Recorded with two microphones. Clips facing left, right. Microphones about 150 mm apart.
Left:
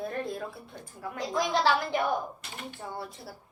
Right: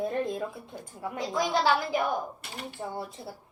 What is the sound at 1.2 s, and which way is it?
Speech, centre (ahead or behind).